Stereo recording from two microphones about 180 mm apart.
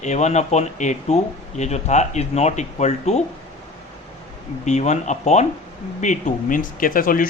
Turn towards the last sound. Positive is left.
turn(degrees=50)  # may be behind; listen again after turning